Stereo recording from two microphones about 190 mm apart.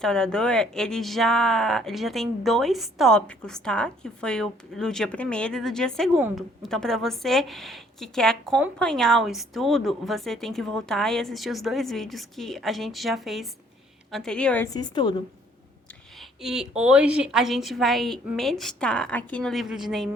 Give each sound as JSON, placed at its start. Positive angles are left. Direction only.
{"t": 0.0, "sound": "speech", "side_deg": 5}
{"t": 14.7, "sound": "a woman's voice", "side_deg": 20}
{"t": 16.1, "sound": "speech", "side_deg": 0}